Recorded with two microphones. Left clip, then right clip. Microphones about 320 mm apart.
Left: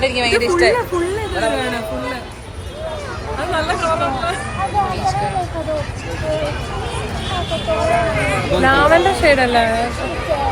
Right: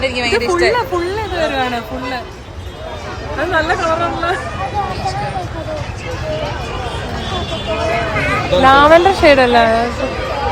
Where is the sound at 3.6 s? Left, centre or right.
Right.